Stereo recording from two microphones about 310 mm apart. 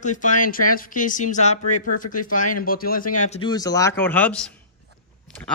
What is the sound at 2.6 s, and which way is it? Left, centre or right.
A man's voice, left.